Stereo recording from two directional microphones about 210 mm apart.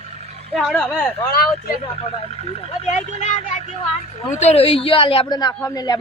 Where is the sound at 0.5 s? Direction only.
5° left (ahead or behind).